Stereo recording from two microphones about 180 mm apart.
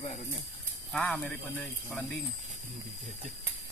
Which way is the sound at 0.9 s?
5° left (ahead or behind).